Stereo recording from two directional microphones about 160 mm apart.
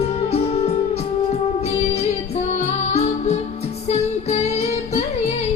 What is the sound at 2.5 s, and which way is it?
Music, 40° left (ahead or behind).